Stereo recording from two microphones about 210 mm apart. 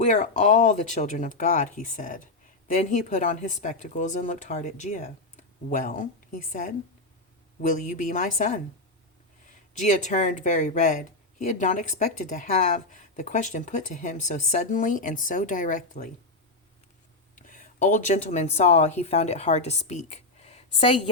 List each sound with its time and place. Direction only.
0.0 s speech: 35° left (ahead or behind)
9.7 s speech: 35° left (ahead or behind)
17.3 s speech: 40° left (ahead or behind)